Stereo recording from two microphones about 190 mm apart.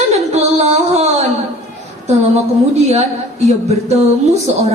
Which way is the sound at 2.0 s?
35° right (ahead or behind).